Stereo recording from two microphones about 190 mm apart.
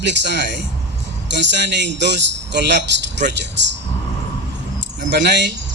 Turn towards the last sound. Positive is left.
turn(degrees=-60)  # may be behind; listen again after turning